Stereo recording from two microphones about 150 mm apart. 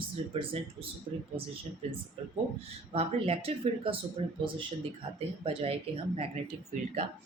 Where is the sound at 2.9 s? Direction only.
40° right (ahead or behind).